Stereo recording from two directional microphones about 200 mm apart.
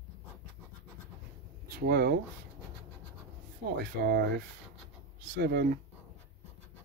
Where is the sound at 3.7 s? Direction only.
55° right (ahead or behind).